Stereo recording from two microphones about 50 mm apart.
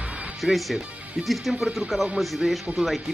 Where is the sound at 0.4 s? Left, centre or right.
Centre.